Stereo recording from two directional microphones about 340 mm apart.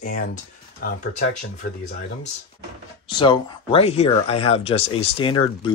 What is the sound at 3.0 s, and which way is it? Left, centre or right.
Speech, centre.